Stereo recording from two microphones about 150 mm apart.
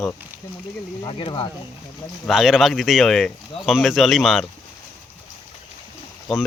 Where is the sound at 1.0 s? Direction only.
35° left (ahead or behind).